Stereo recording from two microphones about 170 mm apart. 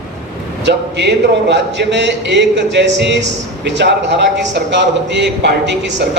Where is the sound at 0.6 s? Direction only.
90° right.